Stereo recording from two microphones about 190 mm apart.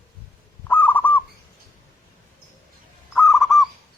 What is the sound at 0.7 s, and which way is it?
Fowl, 10° left (ahead or behind).